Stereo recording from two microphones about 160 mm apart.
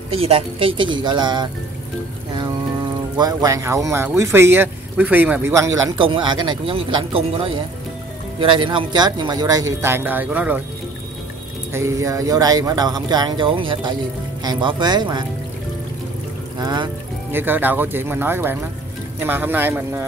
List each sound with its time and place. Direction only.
0.1 s speech: 35° right (ahead or behind)
3.2 s speech: 25° right (ahead or behind)
5.9 s speech: 30° right (ahead or behind); by 10.6 s 10° right (ahead or behind)
11.7 s speech: 20° right (ahead or behind)
16.5 s speech: 25° right (ahead or behind)
17.3 s speech: 15° right (ahead or behind)